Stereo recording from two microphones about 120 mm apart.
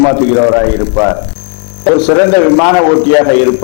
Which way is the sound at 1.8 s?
10° left (ahead or behind).